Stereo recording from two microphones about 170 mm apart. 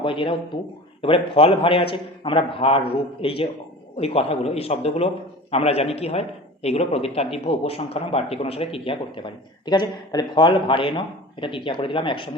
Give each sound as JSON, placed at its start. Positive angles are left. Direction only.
{"t": 0.0, "sound": "a man's voice", "side_deg": 30}